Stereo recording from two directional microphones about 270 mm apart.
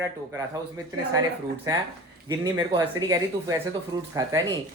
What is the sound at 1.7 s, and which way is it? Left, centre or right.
Speech, centre.